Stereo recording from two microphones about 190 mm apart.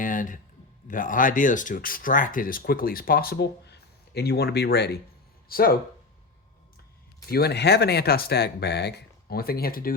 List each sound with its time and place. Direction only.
0.0 s a sound: 45° left (ahead or behind)
0.9 s speech: 45° left (ahead or behind)
7.3 s speech: 55° left (ahead or behind)